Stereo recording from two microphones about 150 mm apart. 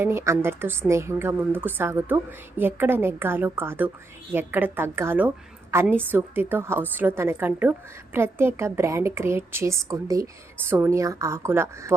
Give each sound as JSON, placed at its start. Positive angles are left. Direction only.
{"t": 0.0, "sound": "a woman's voice", "side_deg": -15}